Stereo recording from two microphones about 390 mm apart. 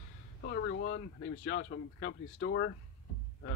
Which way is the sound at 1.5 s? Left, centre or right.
Left.